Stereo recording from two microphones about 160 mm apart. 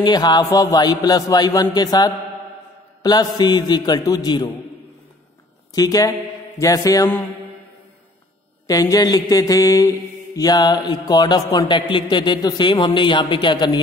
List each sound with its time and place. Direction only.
0.0 s mantra: 25° left (ahead or behind)
5.7 s speech: 25° left (ahead or behind)
6.6 s mantra: 20° left (ahead or behind)
8.6 s mantra: 20° left (ahead or behind)